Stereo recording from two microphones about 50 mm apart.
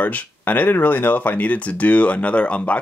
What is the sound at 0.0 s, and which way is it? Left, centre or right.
Speech, left.